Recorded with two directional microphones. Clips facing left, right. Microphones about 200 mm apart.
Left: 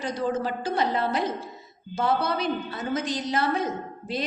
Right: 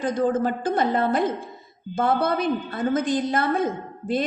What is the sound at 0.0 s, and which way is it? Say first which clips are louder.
A woman's voice: right 5 dB; 50° right (ahead or behind).